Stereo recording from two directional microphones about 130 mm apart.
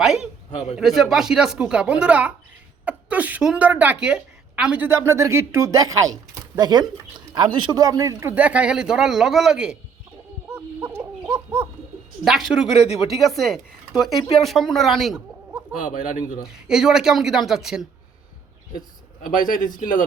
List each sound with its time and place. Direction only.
0.0 s a sound: centre (ahead or behind)
0.8 s a woman's voice: centre (ahead or behind)
10.5 s a sound: 15° right (ahead or behind)
12.2 s a man's voice: centre (ahead or behind)
15.8 s speech: 75° left (ahead or behind)
16.4 s speech: 5° right (ahead or behind)
18.8 s a man's voice: 90° left